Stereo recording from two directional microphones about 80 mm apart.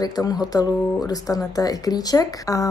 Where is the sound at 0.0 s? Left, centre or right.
Left.